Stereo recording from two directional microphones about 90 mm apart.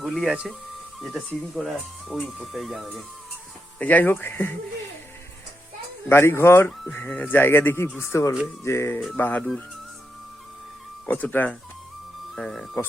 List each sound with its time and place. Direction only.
0.0 s speech: centre (ahead or behind)
3.8 s speech: 20° left (ahead or behind)
6.1 s speech: 25° left (ahead or behind)
11.0 s speech: 15° left (ahead or behind)
12.4 s speech: 5° left (ahead or behind)